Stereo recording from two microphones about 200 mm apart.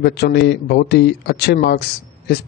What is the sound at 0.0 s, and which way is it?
Speech, 55° left (ahead or behind).